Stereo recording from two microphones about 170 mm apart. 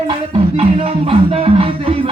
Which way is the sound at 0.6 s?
35° right (ahead or behind).